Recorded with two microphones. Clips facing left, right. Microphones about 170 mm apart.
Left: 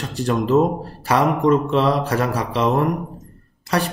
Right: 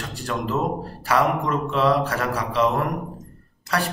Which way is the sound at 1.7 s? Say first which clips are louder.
Left 2 dB; 25° left (ahead or behind).